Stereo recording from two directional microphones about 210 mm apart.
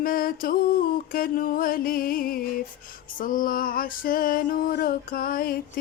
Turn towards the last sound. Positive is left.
turn(degrees=45)  # may be behind; listen again after turning